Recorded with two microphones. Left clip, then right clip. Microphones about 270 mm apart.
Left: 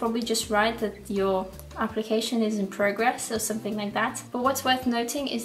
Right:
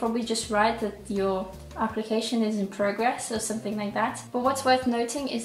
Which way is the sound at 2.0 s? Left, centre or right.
Left.